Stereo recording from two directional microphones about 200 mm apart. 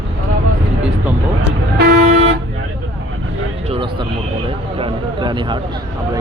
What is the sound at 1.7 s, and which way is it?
Vehicle, 50° right (ahead or behind).